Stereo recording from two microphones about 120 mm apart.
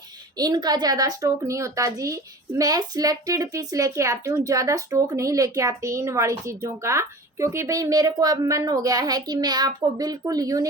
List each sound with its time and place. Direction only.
0.3 s a woman's voice: 35° right (ahead or behind)